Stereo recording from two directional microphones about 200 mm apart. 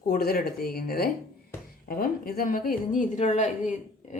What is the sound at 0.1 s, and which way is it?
Speech, 50° left (ahead or behind).